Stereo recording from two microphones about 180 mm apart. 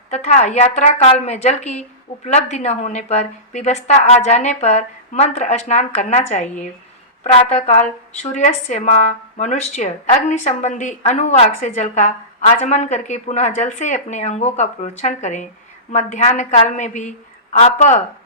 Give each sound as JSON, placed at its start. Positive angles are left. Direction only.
{"t": 0.1, "sound": "a woman's voice", "side_deg": 40}